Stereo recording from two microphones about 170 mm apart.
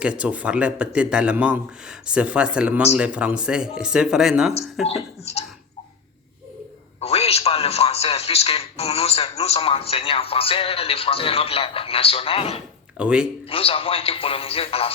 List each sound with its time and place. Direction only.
0.0 s a man's voice: 5° right (ahead or behind)
5.2 s a man's voice: 40° left (ahead or behind)
7.0 s a man's voice: 35° left (ahead or behind)
13.0 s speech: 5° right (ahead or behind)
13.5 s a man's voice: 35° left (ahead or behind)